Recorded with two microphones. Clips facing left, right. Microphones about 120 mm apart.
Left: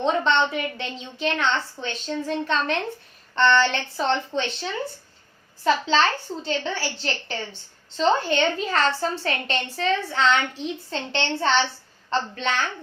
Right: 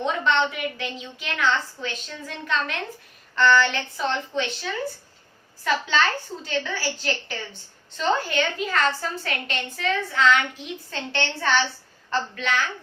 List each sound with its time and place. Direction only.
0.0 s a woman's voice: 30° left (ahead or behind)